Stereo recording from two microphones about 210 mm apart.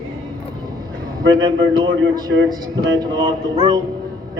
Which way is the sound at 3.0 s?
20° right (ahead or behind).